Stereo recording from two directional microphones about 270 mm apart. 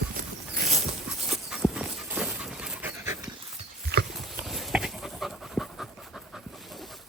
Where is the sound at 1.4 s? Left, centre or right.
Centre.